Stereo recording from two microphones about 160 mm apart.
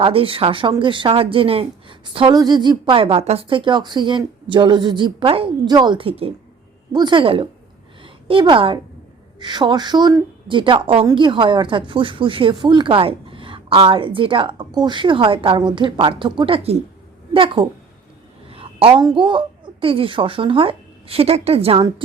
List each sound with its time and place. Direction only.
0.0 s a woman's voice: 35° right (ahead or behind)